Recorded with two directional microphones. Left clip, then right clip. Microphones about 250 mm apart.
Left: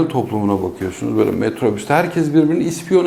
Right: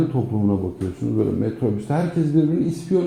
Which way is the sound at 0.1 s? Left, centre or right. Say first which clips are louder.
Left 5 dB; left.